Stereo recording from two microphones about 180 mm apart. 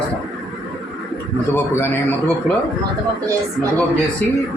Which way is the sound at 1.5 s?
15° left (ahead or behind).